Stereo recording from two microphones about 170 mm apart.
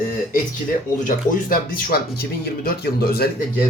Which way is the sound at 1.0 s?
60° left (ahead or behind).